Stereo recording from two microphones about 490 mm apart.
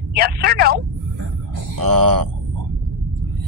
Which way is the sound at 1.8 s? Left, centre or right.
Right.